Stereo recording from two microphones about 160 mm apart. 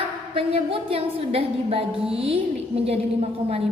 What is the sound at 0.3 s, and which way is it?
A woman's voice, 35° right (ahead or behind).